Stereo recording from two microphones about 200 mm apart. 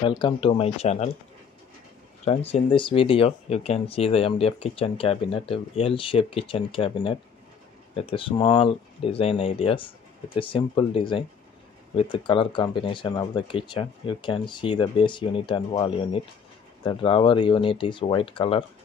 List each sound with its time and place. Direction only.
0.0 s speech: 25° left (ahead or behind)
2.2 s speech: 30° left (ahead or behind)